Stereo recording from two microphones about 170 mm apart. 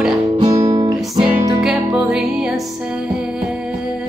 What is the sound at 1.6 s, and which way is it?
Music, 5° right (ahead or behind).